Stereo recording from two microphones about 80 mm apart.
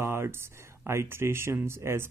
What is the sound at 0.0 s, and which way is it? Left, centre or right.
Speech, right.